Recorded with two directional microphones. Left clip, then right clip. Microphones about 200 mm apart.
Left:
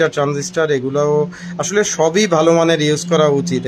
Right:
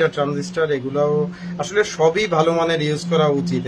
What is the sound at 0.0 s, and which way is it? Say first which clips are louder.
Speech: left 3 dB; 50° left (ahead or behind).